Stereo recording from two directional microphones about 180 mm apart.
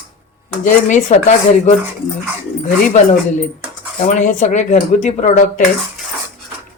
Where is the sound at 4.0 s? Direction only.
45° left (ahead or behind).